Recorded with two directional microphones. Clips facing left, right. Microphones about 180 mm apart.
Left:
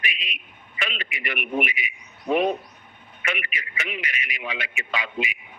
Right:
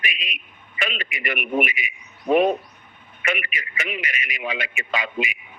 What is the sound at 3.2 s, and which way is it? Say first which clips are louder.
A man's voice: right 4 dB; 50° right (ahead or behind).